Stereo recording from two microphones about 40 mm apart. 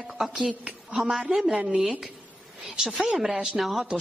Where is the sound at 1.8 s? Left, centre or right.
Centre.